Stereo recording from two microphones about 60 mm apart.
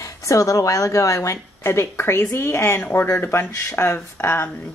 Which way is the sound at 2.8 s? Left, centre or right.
Left.